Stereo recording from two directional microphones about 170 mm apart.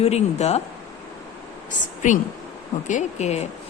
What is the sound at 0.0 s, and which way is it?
Speech, 40° left (ahead or behind).